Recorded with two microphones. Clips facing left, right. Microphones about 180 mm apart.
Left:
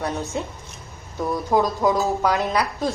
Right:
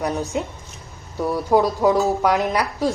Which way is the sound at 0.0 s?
15° right (ahead or behind).